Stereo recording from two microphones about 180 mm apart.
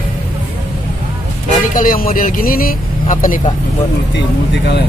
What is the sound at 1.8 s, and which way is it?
Speech, 50° left (ahead or behind).